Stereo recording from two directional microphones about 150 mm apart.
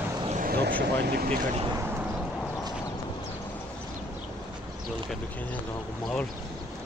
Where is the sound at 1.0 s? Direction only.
90° right.